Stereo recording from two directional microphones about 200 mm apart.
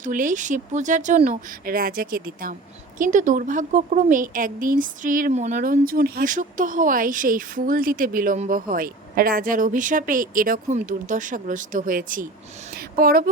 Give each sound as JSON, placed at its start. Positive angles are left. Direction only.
{"t": 0.0, "sound": "speech", "side_deg": -40}